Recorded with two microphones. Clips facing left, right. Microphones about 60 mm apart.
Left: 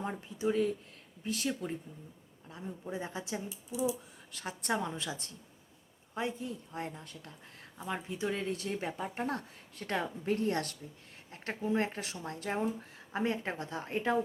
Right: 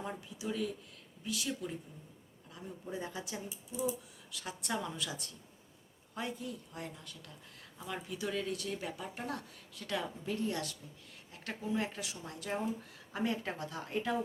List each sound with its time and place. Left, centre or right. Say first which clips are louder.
0.3 s speech: left 8 dB; left
2.5 s speech: left 3 dB; left
4.3 s speech: left 2 dB; left
4.7 s speech: left 4 dB; left